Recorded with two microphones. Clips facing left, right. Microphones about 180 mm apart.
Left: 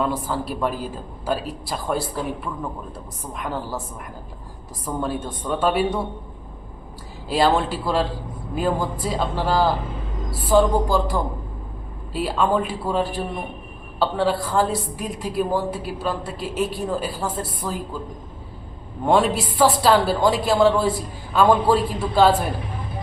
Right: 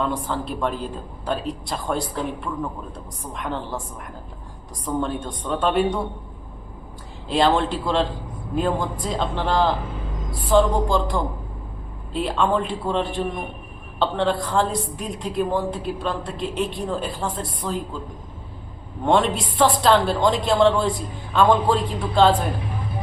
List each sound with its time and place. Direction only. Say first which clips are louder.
0.0 s a woman's voice: left 1 dB; 5° left (ahead or behind)
4.9 s a woman's voice: right 1 dB; 5° left (ahead or behind)
7.3 s a woman's voice: even; 5° left (ahead or behind)
19.0 s a woman's voice: left 1 dB; 5° left (ahead or behind)